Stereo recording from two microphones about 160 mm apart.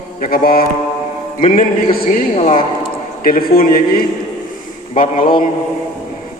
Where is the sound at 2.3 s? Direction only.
40° left (ahead or behind).